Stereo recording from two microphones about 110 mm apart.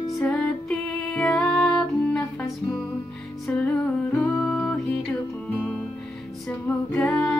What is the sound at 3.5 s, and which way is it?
Music, 10° left (ahead or behind).